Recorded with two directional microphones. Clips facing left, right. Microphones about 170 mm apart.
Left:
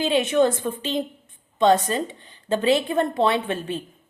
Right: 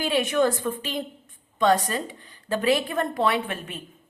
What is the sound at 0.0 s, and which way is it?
A woman's voice, 25° left (ahead or behind).